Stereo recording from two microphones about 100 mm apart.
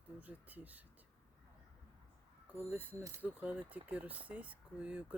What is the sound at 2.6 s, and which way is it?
Speech, 15° right (ahead or behind).